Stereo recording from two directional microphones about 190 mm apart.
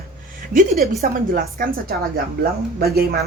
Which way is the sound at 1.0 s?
50° right (ahead or behind).